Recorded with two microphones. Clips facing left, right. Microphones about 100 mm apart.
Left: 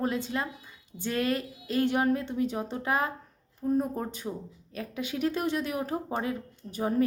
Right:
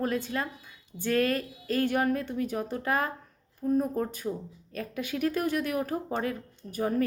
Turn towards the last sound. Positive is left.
turn(degrees=20)  # may be behind; listen again after turning